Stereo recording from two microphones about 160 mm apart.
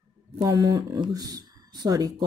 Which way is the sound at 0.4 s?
20° right (ahead or behind).